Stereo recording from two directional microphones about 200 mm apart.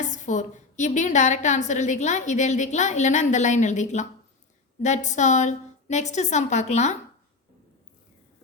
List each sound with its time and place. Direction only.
0.1 s a woman's voice: 40° left (ahead or behind)